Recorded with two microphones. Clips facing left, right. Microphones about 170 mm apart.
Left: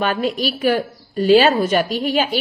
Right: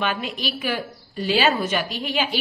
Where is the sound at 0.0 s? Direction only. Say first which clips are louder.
Left 7 dB; 40° left (ahead or behind).